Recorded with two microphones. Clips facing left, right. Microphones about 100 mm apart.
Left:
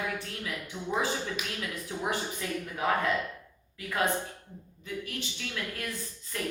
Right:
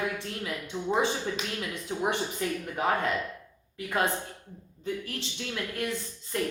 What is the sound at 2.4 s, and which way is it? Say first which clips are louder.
Speech: right 4 dB; 35° right (ahead or behind).